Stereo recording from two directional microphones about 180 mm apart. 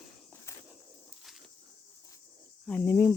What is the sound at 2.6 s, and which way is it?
Cricket, 10° left (ahead or behind).